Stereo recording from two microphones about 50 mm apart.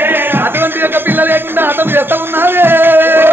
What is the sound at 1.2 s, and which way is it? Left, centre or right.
Music, right.